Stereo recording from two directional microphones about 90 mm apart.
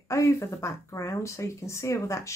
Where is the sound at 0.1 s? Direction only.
35° left (ahead or behind).